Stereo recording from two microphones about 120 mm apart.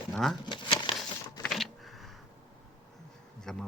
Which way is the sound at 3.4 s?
5° left (ahead or behind).